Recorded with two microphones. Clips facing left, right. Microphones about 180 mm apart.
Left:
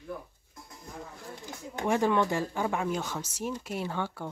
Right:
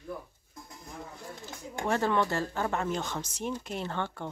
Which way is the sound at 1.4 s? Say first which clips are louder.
Left 2 dB; 15° left (ahead or behind).